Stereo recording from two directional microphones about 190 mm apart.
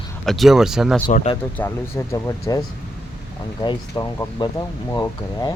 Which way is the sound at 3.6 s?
20° left (ahead or behind).